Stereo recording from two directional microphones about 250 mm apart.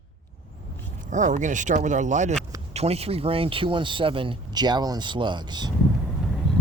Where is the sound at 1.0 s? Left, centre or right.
Right.